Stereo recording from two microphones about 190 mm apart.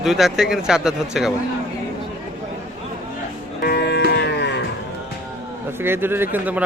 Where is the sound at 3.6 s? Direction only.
55° left (ahead or behind).